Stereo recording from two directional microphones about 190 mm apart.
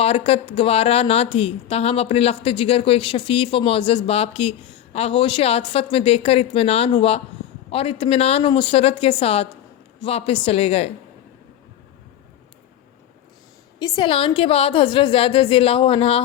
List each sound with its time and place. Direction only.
0.0 s a woman's voice: 30° left (ahead or behind)
13.7 s a woman's voice: 20° left (ahead or behind)